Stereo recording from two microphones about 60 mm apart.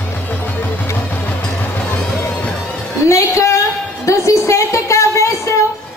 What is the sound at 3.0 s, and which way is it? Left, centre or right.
A woman's voice, left.